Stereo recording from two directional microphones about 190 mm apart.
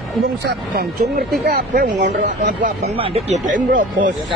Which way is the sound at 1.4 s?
50° right (ahead or behind).